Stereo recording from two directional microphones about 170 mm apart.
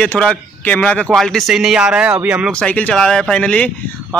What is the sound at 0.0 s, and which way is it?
Speech, 5° left (ahead or behind).